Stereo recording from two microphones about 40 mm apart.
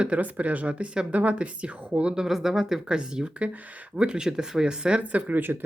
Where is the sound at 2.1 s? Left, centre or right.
Centre.